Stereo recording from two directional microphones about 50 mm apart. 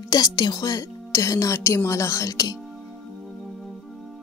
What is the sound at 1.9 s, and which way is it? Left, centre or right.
Speech, left.